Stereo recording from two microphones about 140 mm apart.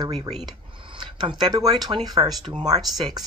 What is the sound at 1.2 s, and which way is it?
Speech, 30° right (ahead or behind).